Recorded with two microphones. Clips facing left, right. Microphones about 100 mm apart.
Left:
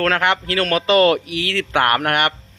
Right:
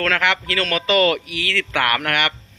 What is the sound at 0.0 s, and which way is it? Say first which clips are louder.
A man's voice: left 2 dB; 40° left (ahead or behind).